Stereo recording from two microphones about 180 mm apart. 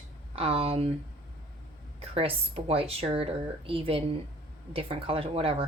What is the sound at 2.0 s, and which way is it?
Speech, 30° right (ahead or behind).